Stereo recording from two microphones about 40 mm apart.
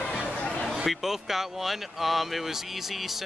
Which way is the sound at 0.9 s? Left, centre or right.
Centre.